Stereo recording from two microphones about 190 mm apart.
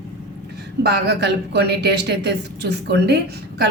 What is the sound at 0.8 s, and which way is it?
Speech, 60° right (ahead or behind).